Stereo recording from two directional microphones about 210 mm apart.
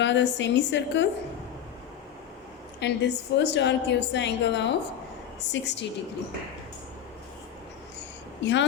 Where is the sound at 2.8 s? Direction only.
55° left (ahead or behind).